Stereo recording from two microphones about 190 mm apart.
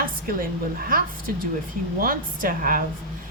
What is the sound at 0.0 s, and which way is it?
A woman's voice, 50° right (ahead or behind).